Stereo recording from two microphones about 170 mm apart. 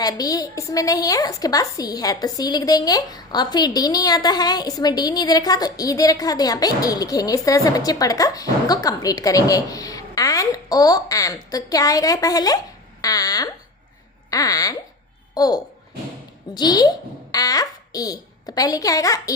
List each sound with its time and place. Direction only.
0.0 s a woman's voice: 20° left (ahead or behind)